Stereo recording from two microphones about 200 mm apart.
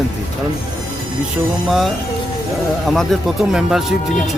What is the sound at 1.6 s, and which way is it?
Speech, centre (ahead or behind).